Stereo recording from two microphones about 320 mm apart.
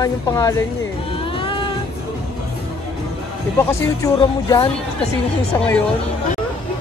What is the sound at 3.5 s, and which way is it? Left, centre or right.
A woman's voice, centre.